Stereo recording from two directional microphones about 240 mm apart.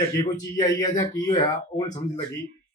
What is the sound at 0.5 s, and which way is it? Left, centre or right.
Speech, centre.